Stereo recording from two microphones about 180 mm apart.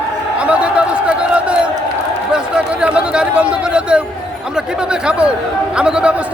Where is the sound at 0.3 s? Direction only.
5° right (ahead or behind).